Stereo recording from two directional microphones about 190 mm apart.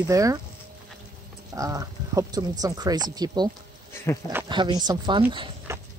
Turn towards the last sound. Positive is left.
turn(degrees=-25)  # may be behind; listen again after turning